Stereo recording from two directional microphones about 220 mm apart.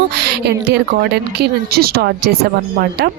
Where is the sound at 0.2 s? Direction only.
50° right (ahead or behind).